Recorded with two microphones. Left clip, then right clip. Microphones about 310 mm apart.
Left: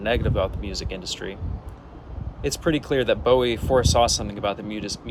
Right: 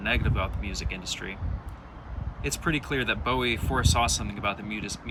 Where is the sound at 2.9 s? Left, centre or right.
Left.